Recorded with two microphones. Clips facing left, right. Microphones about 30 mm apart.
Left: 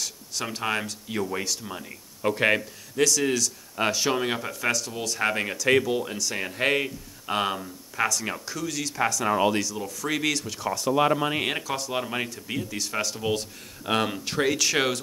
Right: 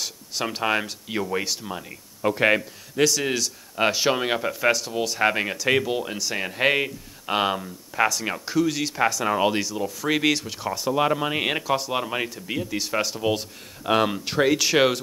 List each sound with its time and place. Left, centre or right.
0.0 s speech: right
1.7 s speech: centre
3.0 s speech: right
10.9 s speech: centre